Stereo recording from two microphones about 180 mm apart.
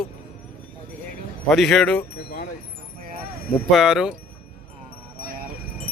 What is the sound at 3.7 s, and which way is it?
Speech, 5° right (ahead or behind).